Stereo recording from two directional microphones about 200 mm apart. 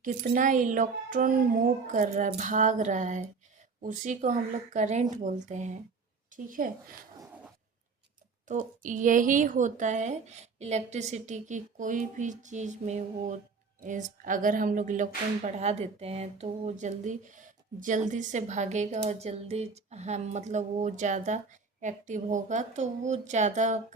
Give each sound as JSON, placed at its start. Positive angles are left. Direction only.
{"t": 0.0, "sound": "a woman's voice", "side_deg": -45}
{"t": 8.4, "sound": "speech", "side_deg": -40}